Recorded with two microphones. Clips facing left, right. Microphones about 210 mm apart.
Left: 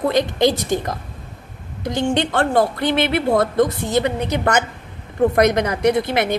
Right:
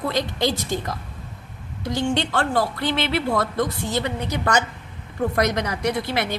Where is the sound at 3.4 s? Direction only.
50° left (ahead or behind).